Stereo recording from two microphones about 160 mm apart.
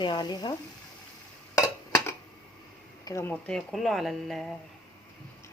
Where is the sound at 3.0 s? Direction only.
20° left (ahead or behind); by 4.4 s centre (ahead or behind).